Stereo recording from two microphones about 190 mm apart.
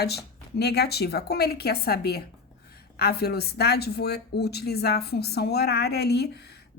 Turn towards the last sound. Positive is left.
turn(degrees=60)  # may be behind; listen again after turning